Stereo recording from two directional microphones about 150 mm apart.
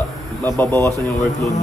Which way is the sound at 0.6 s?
20° left (ahead or behind).